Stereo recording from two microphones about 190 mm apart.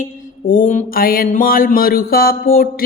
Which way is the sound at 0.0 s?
45° left (ahead or behind).